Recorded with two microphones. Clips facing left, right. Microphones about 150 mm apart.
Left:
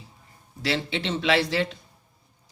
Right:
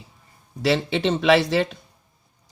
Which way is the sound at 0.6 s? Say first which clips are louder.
Right 7 dB; 60° right (ahead or behind).